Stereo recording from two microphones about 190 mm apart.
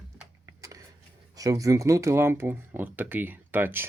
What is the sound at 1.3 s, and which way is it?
Speech, 20° right (ahead or behind).